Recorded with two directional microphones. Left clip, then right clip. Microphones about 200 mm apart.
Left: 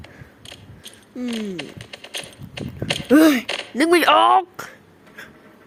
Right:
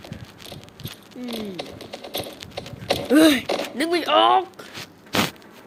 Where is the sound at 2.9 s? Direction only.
30° left (ahead or behind).